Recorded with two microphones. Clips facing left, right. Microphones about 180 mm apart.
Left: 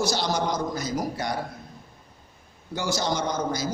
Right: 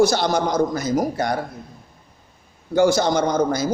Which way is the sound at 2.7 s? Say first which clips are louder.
Right 10 dB; 55° right (ahead or behind).